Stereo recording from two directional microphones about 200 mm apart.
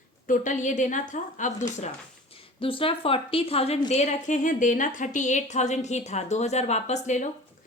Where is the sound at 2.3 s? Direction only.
25° left (ahead or behind).